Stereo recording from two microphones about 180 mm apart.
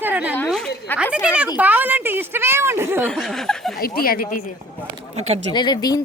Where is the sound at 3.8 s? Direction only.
55° left (ahead or behind).